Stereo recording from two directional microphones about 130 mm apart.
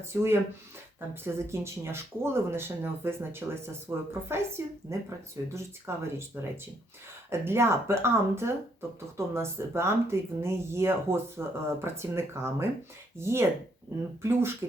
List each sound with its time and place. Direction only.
0.1 s speech: 20° right (ahead or behind)
7.3 s speech: 20° right (ahead or behind)